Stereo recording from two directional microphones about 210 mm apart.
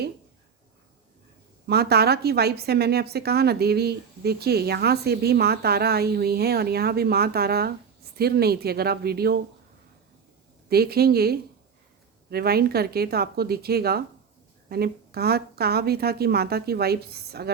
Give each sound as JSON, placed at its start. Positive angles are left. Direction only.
{"t": 1.6, "sound": "a woman's voice", "side_deg": -50}
{"t": 10.7, "sound": "a woman's voice", "side_deg": -50}